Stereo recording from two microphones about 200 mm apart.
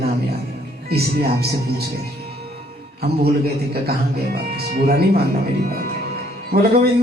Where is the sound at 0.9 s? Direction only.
50° right (ahead or behind).